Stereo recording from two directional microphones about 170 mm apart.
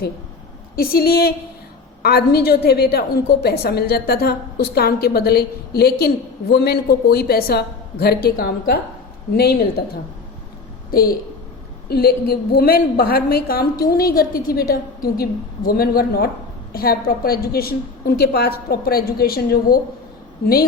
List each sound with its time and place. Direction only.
0.8 s a woman's voice: 60° left (ahead or behind)